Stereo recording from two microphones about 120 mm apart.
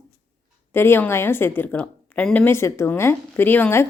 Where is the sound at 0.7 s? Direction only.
20° left (ahead or behind).